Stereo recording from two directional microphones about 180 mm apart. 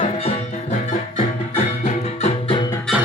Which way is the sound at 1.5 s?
40° left (ahead or behind).